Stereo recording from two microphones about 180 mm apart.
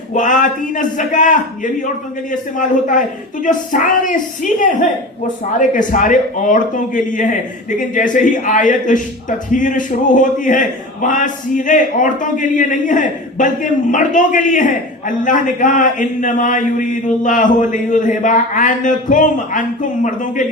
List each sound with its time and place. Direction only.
0.1 s a man's voice: 45° left (ahead or behind)
5.5 s a man's voice: 45° left (ahead or behind)